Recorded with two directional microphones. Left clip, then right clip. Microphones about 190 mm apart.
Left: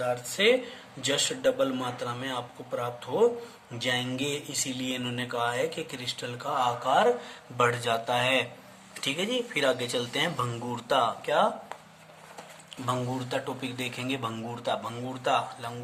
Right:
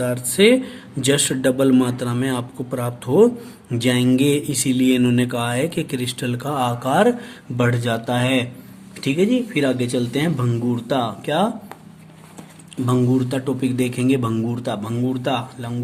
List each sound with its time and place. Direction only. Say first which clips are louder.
0.0 s speech: right 9 dB; 40° right (ahead or behind)
7.5 s speech: right 4 dB; 20° right (ahead or behind)
12.7 s speech: right 11 dB; 20° right (ahead or behind)